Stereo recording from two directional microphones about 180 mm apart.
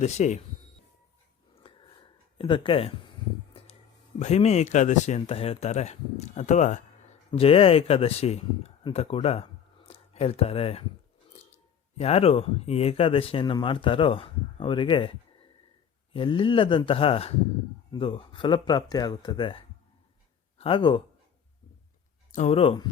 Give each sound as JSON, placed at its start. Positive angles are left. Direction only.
{"t": 0.0, "sound": "speech", "side_deg": 40}
{"t": 1.6, "sound": "a sound", "side_deg": 30}
{"t": 4.2, "sound": "speech", "side_deg": 40}
{"t": 22.3, "sound": "speech", "side_deg": 40}